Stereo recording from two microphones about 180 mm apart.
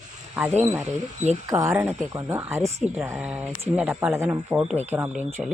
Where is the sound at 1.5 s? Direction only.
15° right (ahead or behind).